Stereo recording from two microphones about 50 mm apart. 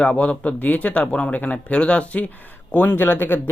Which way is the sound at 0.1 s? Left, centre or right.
Left.